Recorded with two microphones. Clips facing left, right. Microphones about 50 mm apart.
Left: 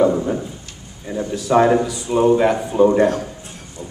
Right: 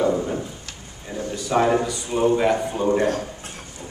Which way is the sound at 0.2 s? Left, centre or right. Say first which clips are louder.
Left 4 dB; centre.